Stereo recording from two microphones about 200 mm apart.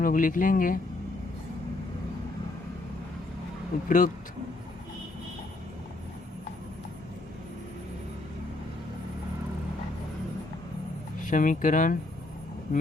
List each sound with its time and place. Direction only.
0.0 s speech: 40° left (ahead or behind)
3.8 s speech: 40° left (ahead or behind)
11.2 s speech: 40° left (ahead or behind)